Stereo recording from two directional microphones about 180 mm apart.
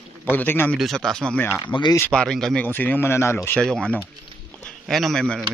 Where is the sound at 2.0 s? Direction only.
5° left (ahead or behind).